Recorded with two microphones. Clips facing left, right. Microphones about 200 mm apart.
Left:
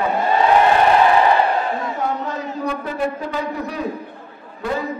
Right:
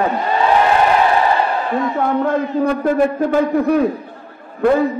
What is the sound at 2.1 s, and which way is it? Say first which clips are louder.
A man's voice: right 8 dB; 55° right (ahead or behind).